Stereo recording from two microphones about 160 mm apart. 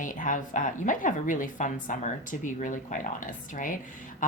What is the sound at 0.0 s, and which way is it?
Speech, 55° left (ahead or behind).